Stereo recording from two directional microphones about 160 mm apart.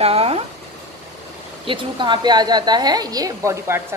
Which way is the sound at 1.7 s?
30° right (ahead or behind).